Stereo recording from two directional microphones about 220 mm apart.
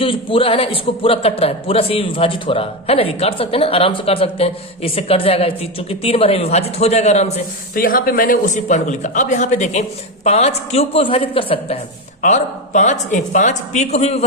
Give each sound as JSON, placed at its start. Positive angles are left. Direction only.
{"t": 0.0, "sound": "a man's voice", "side_deg": 25}